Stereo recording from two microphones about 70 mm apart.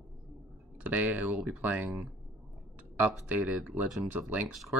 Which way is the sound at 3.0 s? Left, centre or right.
Right.